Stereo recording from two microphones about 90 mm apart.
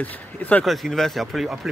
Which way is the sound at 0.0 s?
20° left (ahead or behind).